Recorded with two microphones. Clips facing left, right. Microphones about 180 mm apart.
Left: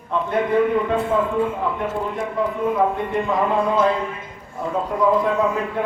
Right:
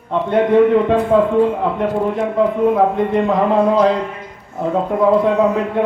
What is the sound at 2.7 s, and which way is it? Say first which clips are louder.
Speech: right 6 dB; 70° right (ahead or behind).